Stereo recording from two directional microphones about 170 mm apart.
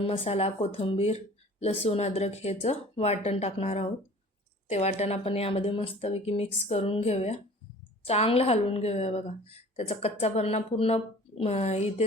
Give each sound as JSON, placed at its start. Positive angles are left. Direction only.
{"t": 0.0, "sound": "a woman's voice", "side_deg": 35}